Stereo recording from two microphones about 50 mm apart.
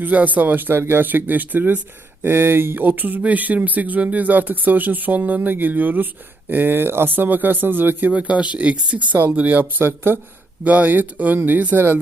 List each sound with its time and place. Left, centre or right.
0.0 s speech: right
2.2 s speech: right
8.1 s speech: right
9.8 s speech: right
10.6 s speech: right